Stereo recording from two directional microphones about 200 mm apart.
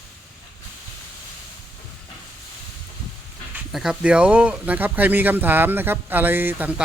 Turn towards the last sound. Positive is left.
turn(degrees=-10)  # may be behind; listen again after turning